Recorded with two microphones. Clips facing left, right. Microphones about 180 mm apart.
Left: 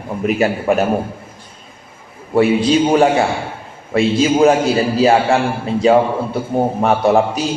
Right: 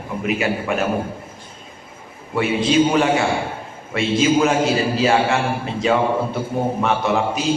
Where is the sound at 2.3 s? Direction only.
35° left (ahead or behind).